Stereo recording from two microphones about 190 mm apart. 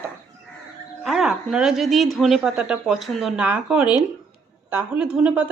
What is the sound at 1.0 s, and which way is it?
A woman's voice, centre (ahead or behind).